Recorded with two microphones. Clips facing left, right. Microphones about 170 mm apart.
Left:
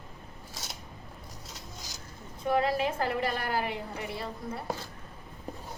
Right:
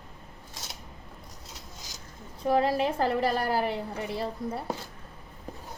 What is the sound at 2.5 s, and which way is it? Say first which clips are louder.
A woman's voice: right 3 dB; 35° right (ahead or behind).